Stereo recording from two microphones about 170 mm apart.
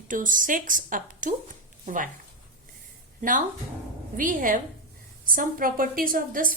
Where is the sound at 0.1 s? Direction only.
50° right (ahead or behind).